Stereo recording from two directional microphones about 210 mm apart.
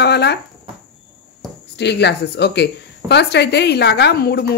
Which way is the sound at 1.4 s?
Centre (ahead or behind).